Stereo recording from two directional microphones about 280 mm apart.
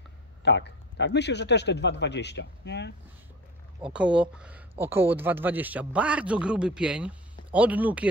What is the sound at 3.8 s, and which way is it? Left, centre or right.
Speech, centre.